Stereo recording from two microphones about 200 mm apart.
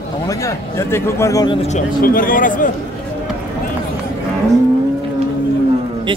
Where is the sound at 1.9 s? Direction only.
45° left (ahead or behind).